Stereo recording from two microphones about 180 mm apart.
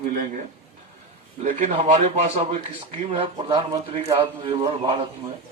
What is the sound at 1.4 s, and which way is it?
Speech, 45° right (ahead or behind).